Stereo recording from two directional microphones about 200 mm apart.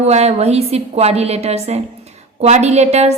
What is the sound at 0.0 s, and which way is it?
A woman's voice, 30° right (ahead or behind).